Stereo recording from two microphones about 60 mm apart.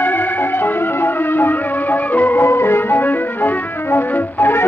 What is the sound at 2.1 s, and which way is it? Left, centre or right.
Music, left.